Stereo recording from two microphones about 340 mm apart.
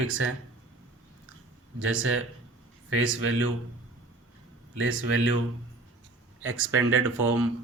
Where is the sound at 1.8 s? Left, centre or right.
Right.